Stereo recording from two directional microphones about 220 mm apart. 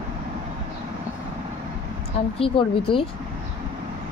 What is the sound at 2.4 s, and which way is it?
Speech, 25° left (ahead or behind).